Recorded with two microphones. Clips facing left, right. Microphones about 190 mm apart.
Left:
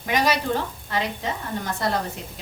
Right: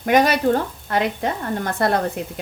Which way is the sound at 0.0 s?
55° right (ahead or behind).